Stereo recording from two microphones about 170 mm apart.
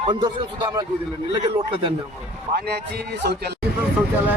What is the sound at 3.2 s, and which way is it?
Speech, 75° right (ahead or behind).